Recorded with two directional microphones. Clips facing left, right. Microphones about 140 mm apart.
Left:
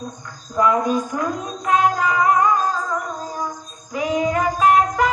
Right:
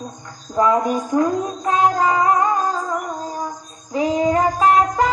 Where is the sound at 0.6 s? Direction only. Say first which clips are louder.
Right 1 dB; 30° right (ahead or behind).